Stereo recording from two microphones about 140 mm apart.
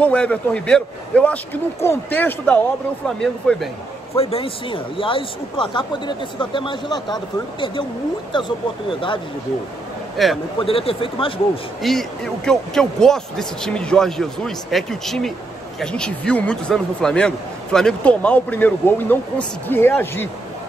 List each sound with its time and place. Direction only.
0.0 s a man's voice: 10° left (ahead or behind)
4.2 s speech: 45° left (ahead or behind)
8.3 s speech: 35° left (ahead or behind)
10.2 s speech: centre (ahead or behind)
10.6 s speech: 40° left (ahead or behind)
11.8 s a man's voice: centre (ahead or behind)